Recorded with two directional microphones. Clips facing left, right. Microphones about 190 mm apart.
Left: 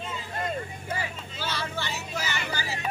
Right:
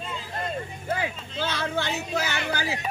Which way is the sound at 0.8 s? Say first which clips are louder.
Right 5 dB; 55° right (ahead or behind).